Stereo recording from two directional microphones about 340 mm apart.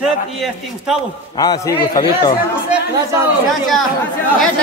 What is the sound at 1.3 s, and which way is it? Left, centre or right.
A man's voice, centre.